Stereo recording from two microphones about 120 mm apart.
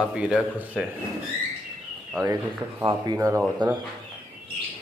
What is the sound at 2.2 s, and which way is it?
Speech, 30° right (ahead or behind).